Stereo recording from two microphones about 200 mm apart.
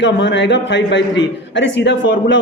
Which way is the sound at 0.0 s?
65° left (ahead or behind).